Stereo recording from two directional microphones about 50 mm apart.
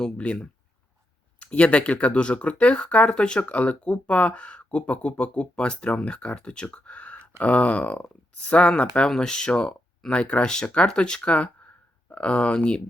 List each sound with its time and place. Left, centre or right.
0.0 s speech: left
1.4 s speech: left
9.0 s speech: centre